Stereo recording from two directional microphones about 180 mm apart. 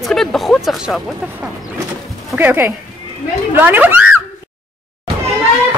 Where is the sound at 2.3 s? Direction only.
10° right (ahead or behind).